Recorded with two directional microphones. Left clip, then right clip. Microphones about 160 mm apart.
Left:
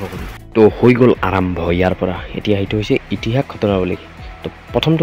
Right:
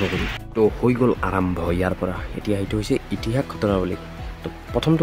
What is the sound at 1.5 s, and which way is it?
Speech, 5° left (ahead or behind).